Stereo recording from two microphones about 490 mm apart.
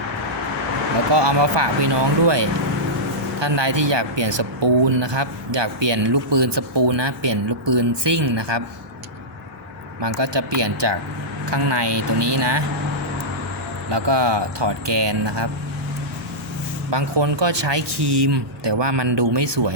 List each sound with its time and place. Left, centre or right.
1.1 s speech: right
10.0 s speech: right
13.9 s speech: right
16.9 s speech: right